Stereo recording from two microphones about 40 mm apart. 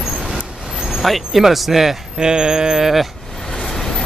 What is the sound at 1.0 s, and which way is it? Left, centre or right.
Speech, centre.